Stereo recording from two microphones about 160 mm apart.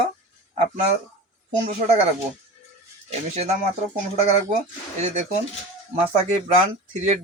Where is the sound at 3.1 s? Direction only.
45° right (ahead or behind).